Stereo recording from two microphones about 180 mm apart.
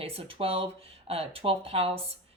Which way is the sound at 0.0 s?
30° right (ahead or behind).